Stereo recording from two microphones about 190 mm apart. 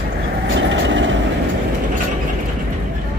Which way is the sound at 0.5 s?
70° right (ahead or behind).